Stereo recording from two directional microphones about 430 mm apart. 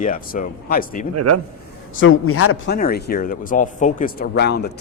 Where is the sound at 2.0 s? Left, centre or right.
Left.